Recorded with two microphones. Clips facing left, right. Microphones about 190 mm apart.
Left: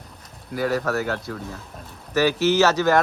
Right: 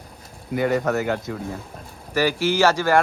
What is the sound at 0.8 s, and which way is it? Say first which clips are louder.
A man's voice: right 2 dB; 15° right (ahead or behind).